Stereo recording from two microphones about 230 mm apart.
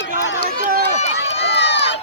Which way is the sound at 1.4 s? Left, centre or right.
Left.